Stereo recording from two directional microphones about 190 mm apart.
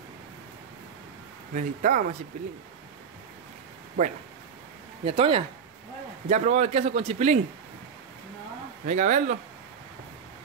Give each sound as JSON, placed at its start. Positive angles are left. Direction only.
{"t": 1.5, "sound": "a man's voice", "side_deg": -45}
{"t": 4.0, "sound": "a man's voice", "side_deg": -40}
{"t": 5.0, "sound": "a man's voice", "side_deg": -30}
{"t": 8.8, "sound": "a man's voice", "side_deg": -40}